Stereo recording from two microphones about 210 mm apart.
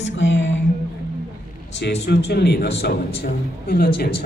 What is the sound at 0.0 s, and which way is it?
Music, 60° left (ahead or behind).